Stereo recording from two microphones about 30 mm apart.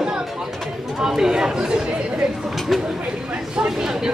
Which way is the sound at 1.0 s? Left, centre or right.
Centre.